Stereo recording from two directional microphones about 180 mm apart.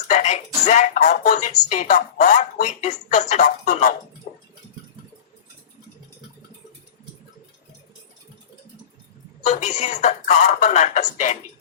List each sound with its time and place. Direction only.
0.1 s speech: 40° left (ahead or behind)
9.4 s speech: 40° left (ahead or behind)